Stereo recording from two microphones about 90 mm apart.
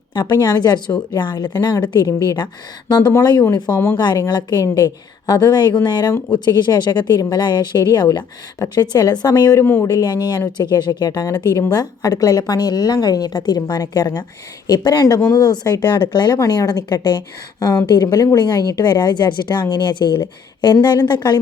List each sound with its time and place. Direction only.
0.1 s a woman's voice: 55° left (ahead or behind)
3.9 s a woman's voice: 55° left (ahead or behind)
4.6 s a woman's voice: 40° left (ahead or behind)